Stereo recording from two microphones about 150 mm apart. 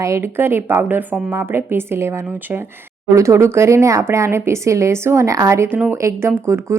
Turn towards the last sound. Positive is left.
turn(degrees=-15)  # may be behind; listen again after turning